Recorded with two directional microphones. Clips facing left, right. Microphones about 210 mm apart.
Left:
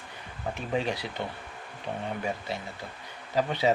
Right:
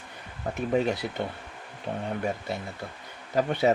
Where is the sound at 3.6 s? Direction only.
50° right (ahead or behind).